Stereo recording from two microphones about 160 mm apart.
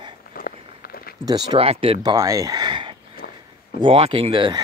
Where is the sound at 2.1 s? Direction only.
20° right (ahead or behind).